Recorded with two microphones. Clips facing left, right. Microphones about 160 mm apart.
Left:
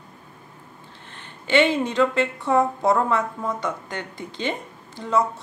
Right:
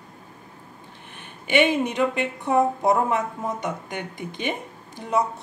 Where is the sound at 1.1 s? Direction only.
15° right (ahead or behind).